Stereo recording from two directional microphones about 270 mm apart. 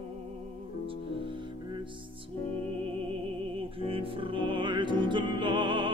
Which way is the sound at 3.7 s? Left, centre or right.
Centre.